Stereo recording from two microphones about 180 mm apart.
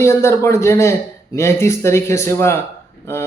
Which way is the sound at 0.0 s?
15° left (ahead or behind).